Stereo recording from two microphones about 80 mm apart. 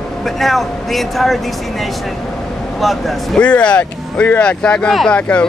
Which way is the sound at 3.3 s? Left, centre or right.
Centre.